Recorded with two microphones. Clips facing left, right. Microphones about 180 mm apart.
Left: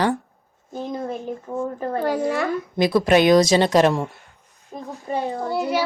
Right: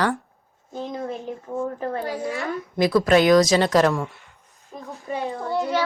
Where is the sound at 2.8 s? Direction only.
20° left (ahead or behind).